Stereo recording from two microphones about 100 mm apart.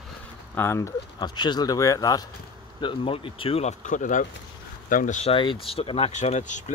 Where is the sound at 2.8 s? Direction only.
65° left (ahead or behind).